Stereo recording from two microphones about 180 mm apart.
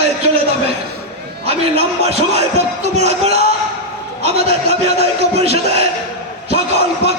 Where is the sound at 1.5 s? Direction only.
35° right (ahead or behind).